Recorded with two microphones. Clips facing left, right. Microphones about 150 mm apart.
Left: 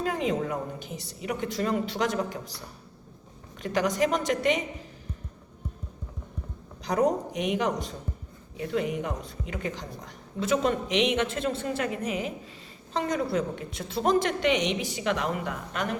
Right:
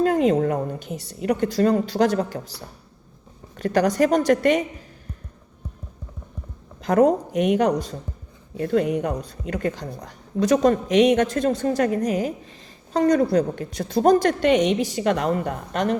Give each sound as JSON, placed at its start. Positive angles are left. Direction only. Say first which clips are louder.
{"t": 0.0, "sound": "a woman's voice", "louder": "right 9 dB", "side_deg": -50}
{"t": 3.6, "sound": "a woman's voice", "louder": "right 6 dB", "side_deg": -45}
{"t": 6.8, "sound": "a woman's voice", "louder": "right 7 dB", "side_deg": -50}